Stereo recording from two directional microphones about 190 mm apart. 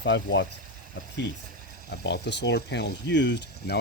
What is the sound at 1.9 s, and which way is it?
Speech, 60° left (ahead or behind).